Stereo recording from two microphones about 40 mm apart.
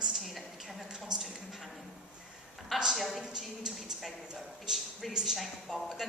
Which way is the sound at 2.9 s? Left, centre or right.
Centre.